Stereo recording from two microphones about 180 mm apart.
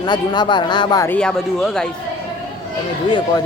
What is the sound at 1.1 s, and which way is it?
Speech, 5° left (ahead or behind).